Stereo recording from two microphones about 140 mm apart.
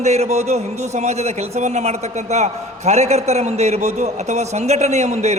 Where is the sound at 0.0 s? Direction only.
50° right (ahead or behind).